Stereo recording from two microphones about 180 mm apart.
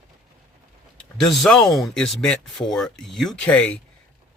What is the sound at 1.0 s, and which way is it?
A man's voice, centre (ahead or behind).